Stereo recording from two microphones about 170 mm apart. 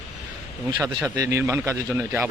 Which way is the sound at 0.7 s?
25° right (ahead or behind).